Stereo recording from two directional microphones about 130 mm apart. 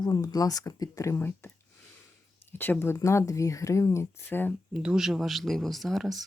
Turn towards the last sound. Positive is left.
turn(degrees=0)  # may be behind; listen again after turning